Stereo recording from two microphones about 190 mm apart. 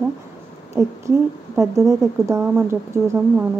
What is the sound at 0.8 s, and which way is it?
Speech, 15° right (ahead or behind).